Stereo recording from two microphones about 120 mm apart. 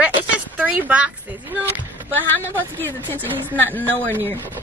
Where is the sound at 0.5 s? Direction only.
15° right (ahead or behind).